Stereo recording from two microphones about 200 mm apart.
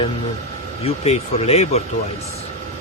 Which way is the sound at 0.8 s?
30° left (ahead or behind).